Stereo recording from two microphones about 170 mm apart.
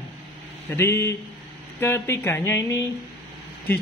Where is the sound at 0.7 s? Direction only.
15° left (ahead or behind).